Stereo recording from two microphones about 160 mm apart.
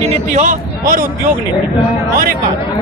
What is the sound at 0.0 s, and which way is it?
A man's voice, 45° right (ahead or behind).